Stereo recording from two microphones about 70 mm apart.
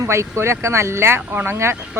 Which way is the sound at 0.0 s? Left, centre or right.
Right.